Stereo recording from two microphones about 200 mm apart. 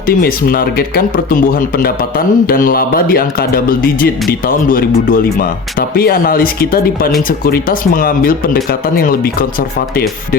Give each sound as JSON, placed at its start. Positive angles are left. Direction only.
{"t": 0.2, "sound": "speech", "side_deg": 45}